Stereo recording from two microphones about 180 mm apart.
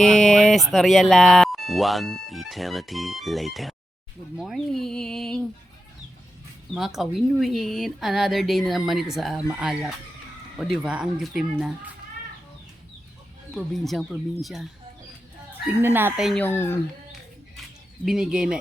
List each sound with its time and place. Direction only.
0.0 s a sound: 5° left (ahead or behind)
0.7 s speech: centre (ahead or behind)
6.7 s speech: centre (ahead or behind)
13.5 s speech: centre (ahead or behind)
15.8 s speech: 10° right (ahead or behind)
16.4 s speech: 15° left (ahead or behind)
18.0 s speech: 5° right (ahead or behind)